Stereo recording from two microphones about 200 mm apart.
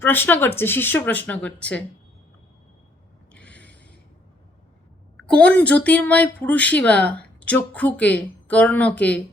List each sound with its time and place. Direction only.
0.0 s speech: 10° left (ahead or behind)
3.3 s mechanisms: 5° left (ahead or behind)
5.3 s speech: 5° left (ahead or behind)